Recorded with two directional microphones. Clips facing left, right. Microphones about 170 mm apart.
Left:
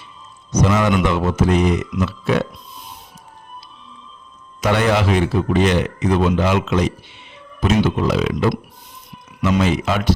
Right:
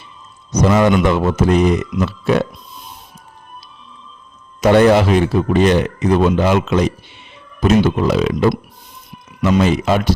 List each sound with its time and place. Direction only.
0.6 s a man's voice: 50° right (ahead or behind)
4.6 s a man's voice: 45° right (ahead or behind)